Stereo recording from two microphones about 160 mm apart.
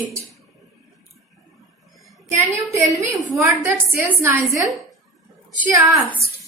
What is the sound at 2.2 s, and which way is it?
A woman's voice, 15° right (ahead or behind).